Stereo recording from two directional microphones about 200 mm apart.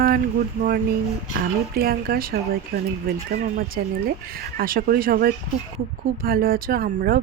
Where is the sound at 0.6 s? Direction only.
50° right (ahead or behind).